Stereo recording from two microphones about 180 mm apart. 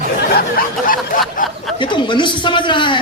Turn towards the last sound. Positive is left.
turn(degrees=25)  # may be behind; listen again after turning